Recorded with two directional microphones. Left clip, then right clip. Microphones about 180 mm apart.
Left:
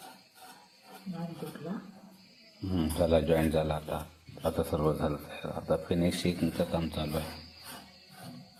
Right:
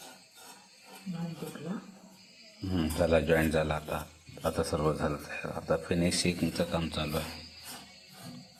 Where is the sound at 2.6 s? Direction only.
Centre (ahead or behind).